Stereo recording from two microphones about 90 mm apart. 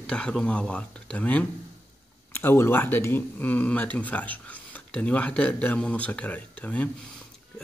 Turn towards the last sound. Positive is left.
turn(degrees=15)  # may be behind; listen again after turning